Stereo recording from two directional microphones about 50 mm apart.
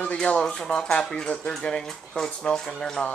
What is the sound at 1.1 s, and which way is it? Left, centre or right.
Speech, left.